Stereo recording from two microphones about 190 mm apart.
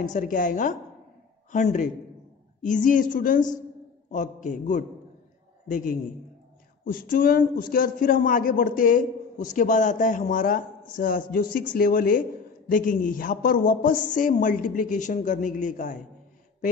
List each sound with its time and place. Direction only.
0.0 s a man's voice: 40° left (ahead or behind)